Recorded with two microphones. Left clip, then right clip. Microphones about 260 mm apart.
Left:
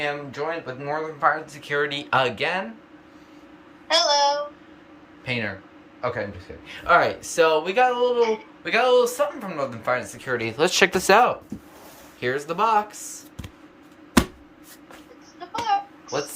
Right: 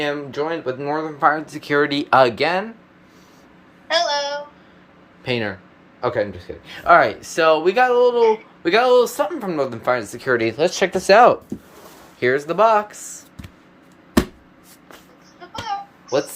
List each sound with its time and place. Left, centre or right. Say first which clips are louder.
0.0 s speech: right 4 dB; right
3.8 s speech: left 1 dB; centre
5.2 s speech: right 4 dB; right
10.6 s speech: even; centre
12.2 s speech: right 7 dB; centre
15.7 s a sound: left 5 dB; left